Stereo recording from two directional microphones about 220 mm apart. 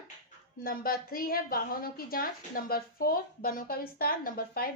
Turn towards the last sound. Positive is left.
turn(degrees=40)  # may be behind; listen again after turning